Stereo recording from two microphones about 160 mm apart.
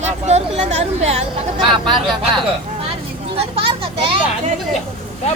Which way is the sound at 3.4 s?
35° right (ahead or behind).